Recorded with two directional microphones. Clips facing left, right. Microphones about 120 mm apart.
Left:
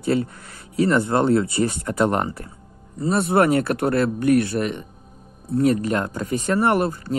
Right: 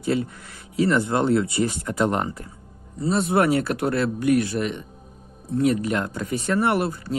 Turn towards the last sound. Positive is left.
turn(degrees=45)  # may be behind; listen again after turning